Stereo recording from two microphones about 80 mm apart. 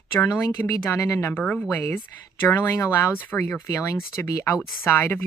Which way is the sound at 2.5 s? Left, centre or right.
Left.